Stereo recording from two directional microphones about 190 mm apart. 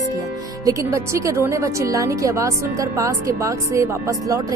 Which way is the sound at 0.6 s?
15° right (ahead or behind).